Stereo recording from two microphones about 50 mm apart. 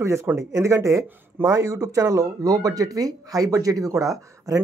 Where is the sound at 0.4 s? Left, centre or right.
Right.